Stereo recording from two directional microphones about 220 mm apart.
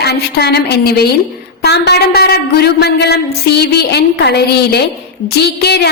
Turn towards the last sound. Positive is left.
turn(degrees=50)  # may be behind; listen again after turning